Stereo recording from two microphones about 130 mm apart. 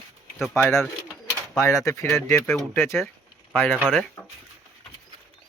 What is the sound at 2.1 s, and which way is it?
Speech, 20° left (ahead or behind).